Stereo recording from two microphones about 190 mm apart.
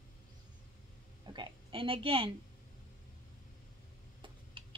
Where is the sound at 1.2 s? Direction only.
25° right (ahead or behind).